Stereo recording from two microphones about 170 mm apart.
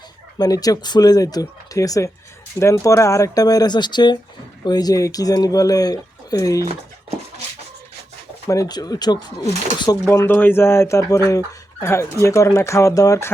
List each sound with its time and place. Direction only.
0.3 s speech: 20° left (ahead or behind)
8.4 s speech: 20° left (ahead or behind)